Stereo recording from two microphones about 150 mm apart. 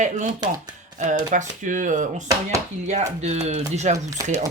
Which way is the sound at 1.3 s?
55° right (ahead or behind).